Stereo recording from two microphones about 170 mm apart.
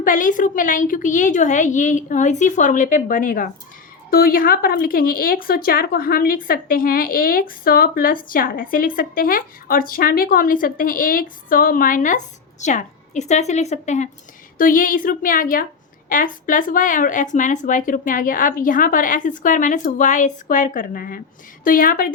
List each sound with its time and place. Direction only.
0.0 s a woman's voice: 50° left (ahead or behind)